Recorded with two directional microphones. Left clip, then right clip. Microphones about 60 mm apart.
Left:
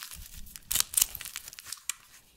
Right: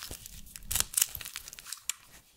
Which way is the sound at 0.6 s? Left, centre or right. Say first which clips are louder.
Left 2 dB; left.